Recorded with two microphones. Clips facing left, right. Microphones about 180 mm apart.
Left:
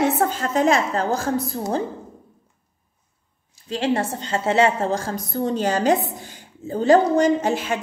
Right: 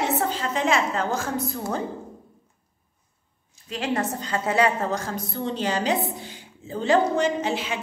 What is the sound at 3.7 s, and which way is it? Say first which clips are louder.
A woman's voice: left 4 dB; 30° left (ahead or behind).